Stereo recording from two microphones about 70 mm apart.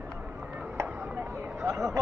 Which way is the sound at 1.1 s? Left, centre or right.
Right.